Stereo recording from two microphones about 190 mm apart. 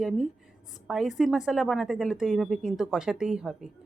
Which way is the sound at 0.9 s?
Centre (ahead or behind).